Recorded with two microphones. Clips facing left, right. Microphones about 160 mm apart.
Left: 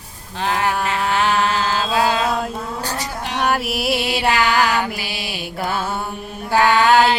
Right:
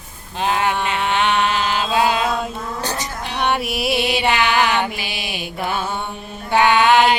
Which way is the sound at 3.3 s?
Centre (ahead or behind).